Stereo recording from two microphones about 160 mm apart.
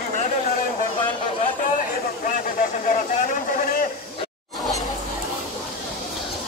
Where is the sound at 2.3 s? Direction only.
55° left (ahead or behind).